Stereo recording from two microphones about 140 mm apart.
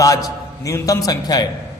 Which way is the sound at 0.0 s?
25° left (ahead or behind).